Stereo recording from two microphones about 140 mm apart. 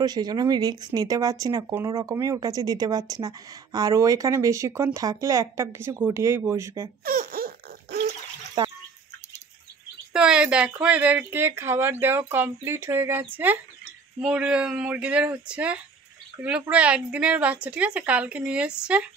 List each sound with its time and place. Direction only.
0.0 s speech: 30° right (ahead or behind)
7.1 s a sound: 90° right
8.6 s bathtub: 30° right (ahead or behind)
10.1 s speech: 5° right (ahead or behind)